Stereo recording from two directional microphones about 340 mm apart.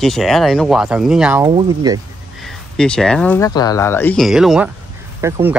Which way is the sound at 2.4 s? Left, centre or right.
Centre.